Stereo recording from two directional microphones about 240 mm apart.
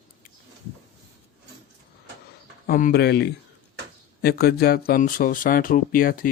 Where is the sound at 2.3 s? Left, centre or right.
Left.